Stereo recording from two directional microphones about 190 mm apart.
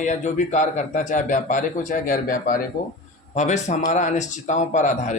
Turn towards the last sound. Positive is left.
turn(degrees=40)  # may be behind; listen again after turning